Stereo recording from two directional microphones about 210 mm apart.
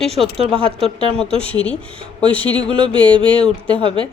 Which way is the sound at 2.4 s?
20° right (ahead or behind).